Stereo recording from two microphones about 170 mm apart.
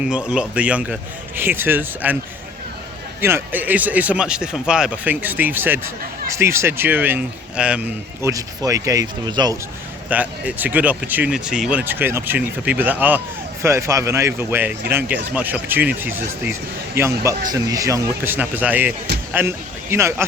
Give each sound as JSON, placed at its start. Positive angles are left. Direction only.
{"t": 0.0, "sound": "speech", "side_deg": -5}
{"t": 3.2, "sound": "speech", "side_deg": -15}
{"t": 8.2, "sound": "speech", "side_deg": -20}
{"t": 10.1, "sound": "a man's voice", "side_deg": -10}